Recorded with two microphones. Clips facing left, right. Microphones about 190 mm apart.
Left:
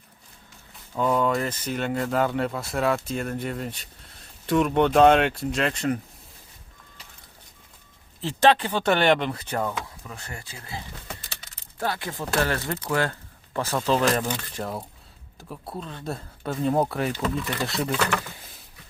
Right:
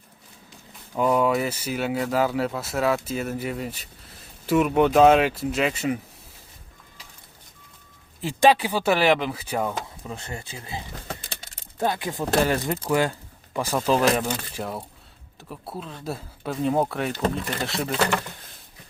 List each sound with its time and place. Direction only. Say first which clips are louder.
0.9 s speech: right 2 dB; 10° right (ahead or behind)
8.2 s speech: right 1 dB; 10° right (ahead or behind)
10.0 s speech: right 5 dB; 25° right (ahead or behind); by 17.9 s centre (ahead or behind)